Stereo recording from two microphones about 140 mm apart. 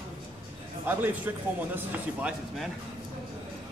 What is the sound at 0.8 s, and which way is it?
A man's voice, 15° right (ahead or behind).